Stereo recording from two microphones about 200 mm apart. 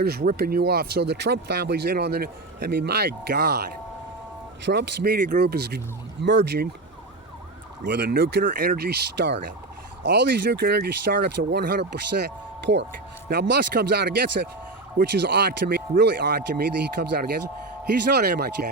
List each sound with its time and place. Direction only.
0.0 s speech: 50° right (ahead or behind)
7.9 s speech: 55° right (ahead or behind)